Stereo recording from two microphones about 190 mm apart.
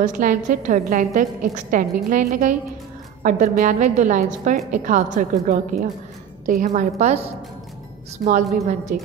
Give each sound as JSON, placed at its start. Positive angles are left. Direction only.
{"t": 0.0, "sound": "a woman's voice", "side_deg": -45}